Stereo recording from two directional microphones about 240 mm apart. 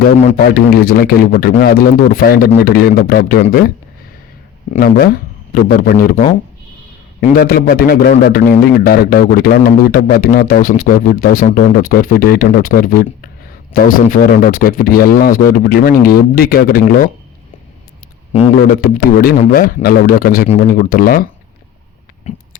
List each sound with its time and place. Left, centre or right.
0.3 s a man's voice: left
4.7 s a man's voice: left
7.3 s a man's voice: left
18.3 s speech: left
18.8 s a man's voice: left